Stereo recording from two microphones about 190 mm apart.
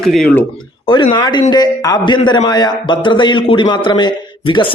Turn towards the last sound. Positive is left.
turn(degrees=25)  # may be behind; listen again after turning